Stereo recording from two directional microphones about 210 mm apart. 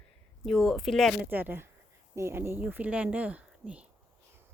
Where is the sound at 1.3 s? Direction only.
10° right (ahead or behind).